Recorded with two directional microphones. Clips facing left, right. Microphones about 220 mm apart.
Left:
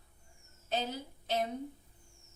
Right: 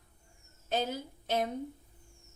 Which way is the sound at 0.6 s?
50° right (ahead or behind).